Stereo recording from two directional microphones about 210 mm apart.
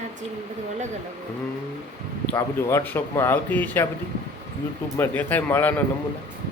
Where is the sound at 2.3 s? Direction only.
10° left (ahead or behind).